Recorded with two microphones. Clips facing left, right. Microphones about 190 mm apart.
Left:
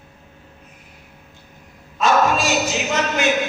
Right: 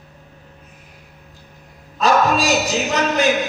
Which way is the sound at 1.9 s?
35° right (ahead or behind).